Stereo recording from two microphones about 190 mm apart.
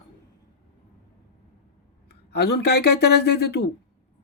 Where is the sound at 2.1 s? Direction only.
60° left (ahead or behind).